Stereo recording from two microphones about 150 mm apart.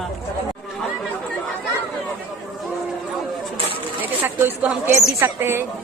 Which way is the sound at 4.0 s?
15° right (ahead or behind).